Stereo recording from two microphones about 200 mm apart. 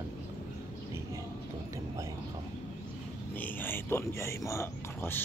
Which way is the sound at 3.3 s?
10° left (ahead or behind).